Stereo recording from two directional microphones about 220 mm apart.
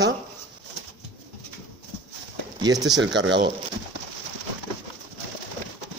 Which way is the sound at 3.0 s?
55° right (ahead or behind).